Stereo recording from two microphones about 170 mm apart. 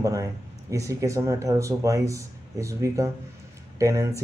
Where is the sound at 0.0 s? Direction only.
20° right (ahead or behind).